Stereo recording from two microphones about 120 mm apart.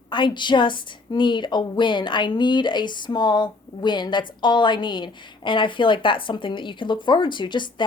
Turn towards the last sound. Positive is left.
turn(degrees=40)  # may be behind; listen again after turning